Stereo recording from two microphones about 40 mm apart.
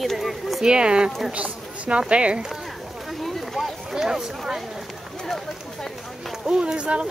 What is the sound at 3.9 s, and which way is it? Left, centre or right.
Speech, centre.